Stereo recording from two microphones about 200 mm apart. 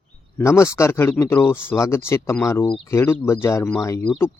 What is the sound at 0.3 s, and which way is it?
Speech, 15° left (ahead or behind).